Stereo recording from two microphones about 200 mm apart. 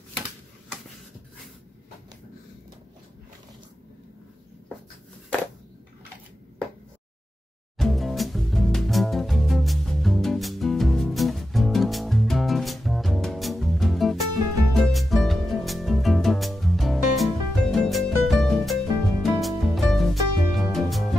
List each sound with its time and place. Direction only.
7.7 s music: centre (ahead or behind)